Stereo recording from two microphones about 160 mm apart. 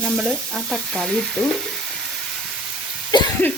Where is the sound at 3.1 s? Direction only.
30° left (ahead or behind).